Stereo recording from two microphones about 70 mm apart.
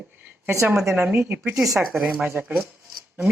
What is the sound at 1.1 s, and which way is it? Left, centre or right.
Speech, right.